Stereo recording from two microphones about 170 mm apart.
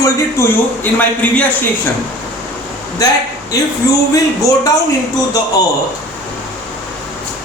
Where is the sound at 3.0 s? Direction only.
20° left (ahead or behind).